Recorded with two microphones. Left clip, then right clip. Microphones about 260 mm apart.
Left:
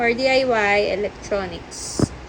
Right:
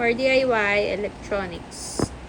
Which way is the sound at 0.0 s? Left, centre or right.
Centre.